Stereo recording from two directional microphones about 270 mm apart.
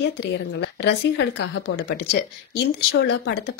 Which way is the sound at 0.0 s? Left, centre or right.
Left.